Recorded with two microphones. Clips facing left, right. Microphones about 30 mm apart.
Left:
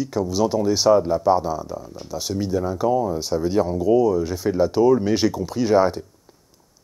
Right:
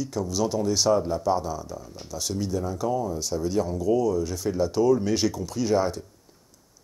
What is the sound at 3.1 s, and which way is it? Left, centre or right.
Speech, left.